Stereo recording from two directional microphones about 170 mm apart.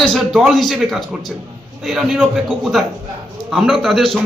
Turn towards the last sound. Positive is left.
turn(degrees=0)  # may be behind; listen again after turning